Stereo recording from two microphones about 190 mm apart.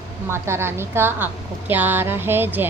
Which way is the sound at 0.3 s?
15° right (ahead or behind).